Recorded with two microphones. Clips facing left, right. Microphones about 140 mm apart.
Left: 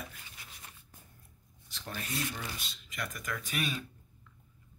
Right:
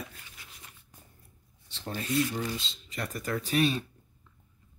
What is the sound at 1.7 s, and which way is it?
Speech, 30° right (ahead or behind).